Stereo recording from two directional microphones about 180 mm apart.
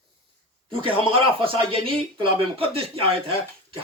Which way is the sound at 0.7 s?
30° right (ahead or behind).